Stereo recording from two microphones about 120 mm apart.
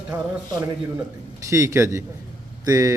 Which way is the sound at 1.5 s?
25° right (ahead or behind).